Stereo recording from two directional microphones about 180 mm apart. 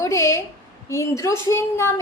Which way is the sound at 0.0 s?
15° left (ahead or behind).